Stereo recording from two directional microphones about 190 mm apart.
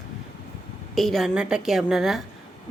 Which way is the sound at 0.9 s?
Centre (ahead or behind).